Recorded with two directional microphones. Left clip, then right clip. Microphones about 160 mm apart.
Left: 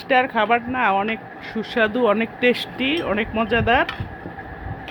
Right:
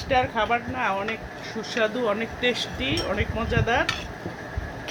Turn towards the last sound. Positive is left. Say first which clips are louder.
# left 6 dB
turn(degrees=70)  # may be behind; listen again after turning